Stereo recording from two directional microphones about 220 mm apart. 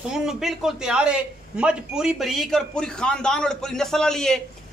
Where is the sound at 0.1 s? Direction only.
Centre (ahead or behind).